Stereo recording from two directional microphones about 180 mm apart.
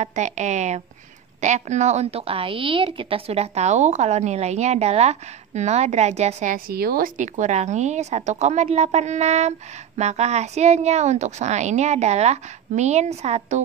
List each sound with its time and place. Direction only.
0.0 s a woman's voice: 40° right (ahead or behind)